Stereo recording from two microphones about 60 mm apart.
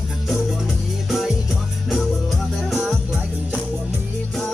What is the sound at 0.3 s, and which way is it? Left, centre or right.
Music, centre.